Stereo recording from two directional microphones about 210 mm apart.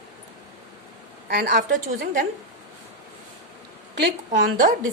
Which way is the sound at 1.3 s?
40° right (ahead or behind).